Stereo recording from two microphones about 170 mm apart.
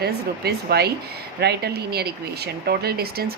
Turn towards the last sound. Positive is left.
turn(degrees=-65)  # may be behind; listen again after turning